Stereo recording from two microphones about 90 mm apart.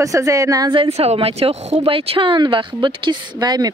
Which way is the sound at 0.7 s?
85° right.